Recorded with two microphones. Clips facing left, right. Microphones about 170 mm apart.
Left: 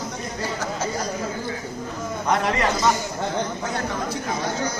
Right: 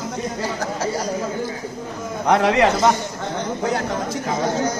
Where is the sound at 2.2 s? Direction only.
75° right (ahead or behind).